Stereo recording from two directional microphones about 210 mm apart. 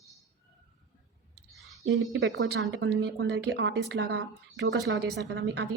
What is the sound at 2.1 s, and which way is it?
A woman's voice, 60° right (ahead or behind).